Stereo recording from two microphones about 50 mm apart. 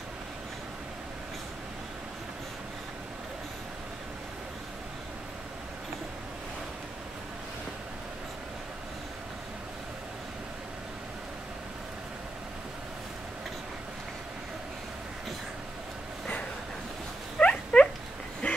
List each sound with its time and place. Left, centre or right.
17.4 s dog: centre
18.4 s quack: left